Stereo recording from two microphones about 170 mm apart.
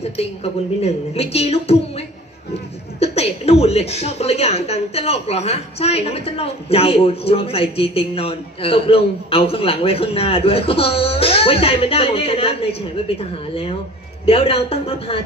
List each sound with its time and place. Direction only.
0.2 s a woman's voice: 35° left (ahead or behind)